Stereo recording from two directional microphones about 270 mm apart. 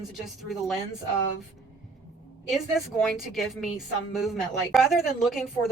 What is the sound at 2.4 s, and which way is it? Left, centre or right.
A woman's voice, centre.